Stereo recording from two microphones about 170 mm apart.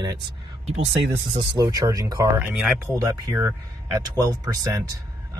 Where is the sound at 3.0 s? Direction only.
20° right (ahead or behind).